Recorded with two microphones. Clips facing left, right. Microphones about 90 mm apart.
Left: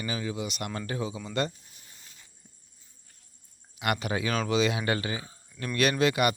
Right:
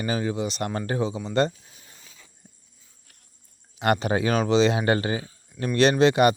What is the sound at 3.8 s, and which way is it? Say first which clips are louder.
Speech: right 7 dB; 35° right (ahead or behind).